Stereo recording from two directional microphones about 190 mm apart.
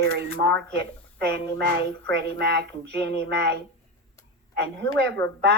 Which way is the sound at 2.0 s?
60° right (ahead or behind).